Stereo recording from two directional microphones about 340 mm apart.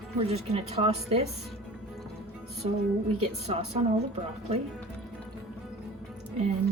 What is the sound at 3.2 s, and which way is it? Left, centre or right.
Speech, centre.